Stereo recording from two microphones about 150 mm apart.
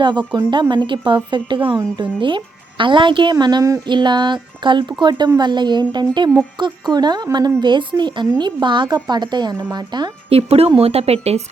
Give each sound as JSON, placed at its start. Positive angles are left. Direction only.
{"t": 0.0, "sound": "a woman's voice", "side_deg": -30}
{"t": 10.2, "sound": "a woman's voice", "side_deg": -40}